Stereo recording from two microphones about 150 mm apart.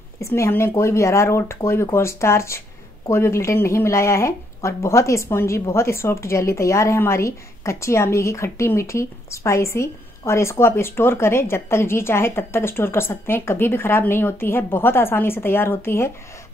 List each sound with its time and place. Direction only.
0.2 s speech: 15° left (ahead or behind)